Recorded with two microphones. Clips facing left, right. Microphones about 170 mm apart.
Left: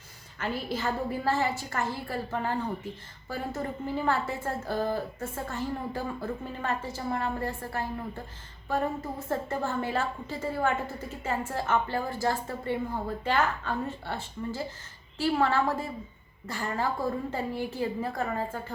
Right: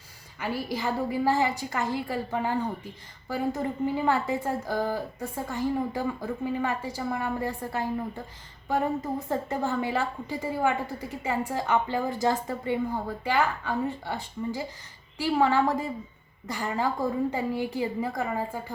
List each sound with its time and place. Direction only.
0.3 s a woman's voice: 10° right (ahead or behind)
9.3 s a woman's voice: 15° right (ahead or behind)